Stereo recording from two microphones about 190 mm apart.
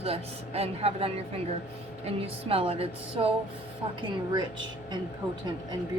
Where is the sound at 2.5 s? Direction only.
30° right (ahead or behind).